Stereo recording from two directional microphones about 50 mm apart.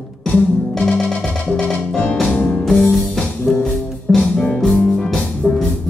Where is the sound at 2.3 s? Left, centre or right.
Left.